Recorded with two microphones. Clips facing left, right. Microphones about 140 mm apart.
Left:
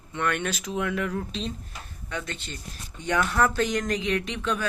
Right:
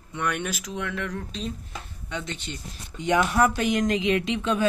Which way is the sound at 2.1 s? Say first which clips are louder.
Right 1 dB; 20° right (ahead or behind).